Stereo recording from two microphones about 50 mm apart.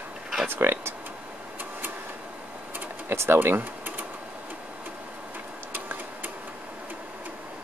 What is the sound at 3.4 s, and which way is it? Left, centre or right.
Speech, right.